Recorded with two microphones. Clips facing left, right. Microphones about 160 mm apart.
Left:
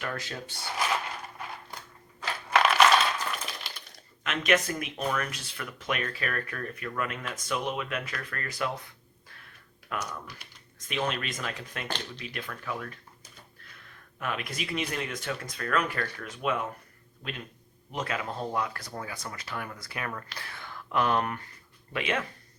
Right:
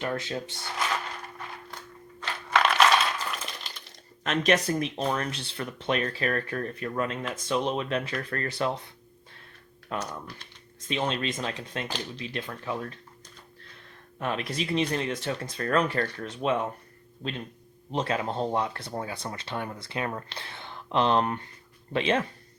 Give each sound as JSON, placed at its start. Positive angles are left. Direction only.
{"t": 0.0, "sound": "speech", "side_deg": -25}
{"t": 2.2, "sound": "a sound", "side_deg": 5}
{"t": 4.2, "sound": "speech", "side_deg": -35}
{"t": 9.9, "sound": "speech", "side_deg": -25}
{"t": 14.2, "sound": "speech", "side_deg": -30}